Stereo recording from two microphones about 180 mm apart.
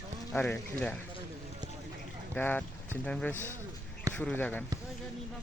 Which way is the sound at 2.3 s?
10° left (ahead or behind).